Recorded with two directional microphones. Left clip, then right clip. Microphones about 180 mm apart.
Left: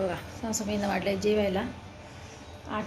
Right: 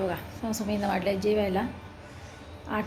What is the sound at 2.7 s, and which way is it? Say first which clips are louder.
Speech: right 2 dB; 15° right (ahead or behind).